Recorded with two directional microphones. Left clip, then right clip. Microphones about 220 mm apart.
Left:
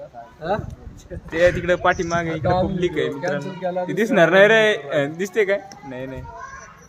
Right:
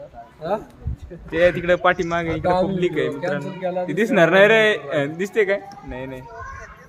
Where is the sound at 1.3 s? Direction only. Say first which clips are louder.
Even; 5° right (ahead or behind).